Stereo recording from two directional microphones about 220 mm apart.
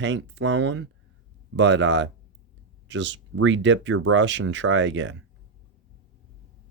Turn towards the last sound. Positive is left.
turn(degrees=-55)  # may be behind; listen again after turning